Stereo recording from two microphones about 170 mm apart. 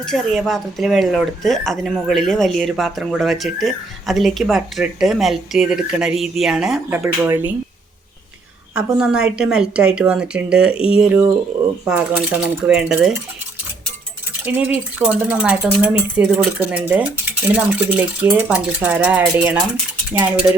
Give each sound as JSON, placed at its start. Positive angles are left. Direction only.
{"t": 0.0, "sound": "speech", "side_deg": 0}
{"t": 7.3, "sound": "stir", "side_deg": -10}
{"t": 8.7, "sound": "speech", "side_deg": -5}
{"t": 11.9, "sound": "stir", "side_deg": -10}
{"t": 14.4, "sound": "stir", "side_deg": -10}